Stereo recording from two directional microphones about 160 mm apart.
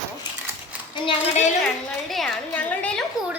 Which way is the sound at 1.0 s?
45° left (ahead or behind).